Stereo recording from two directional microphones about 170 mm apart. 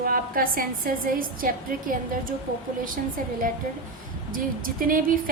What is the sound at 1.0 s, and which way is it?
A woman's voice, 55° right (ahead or behind).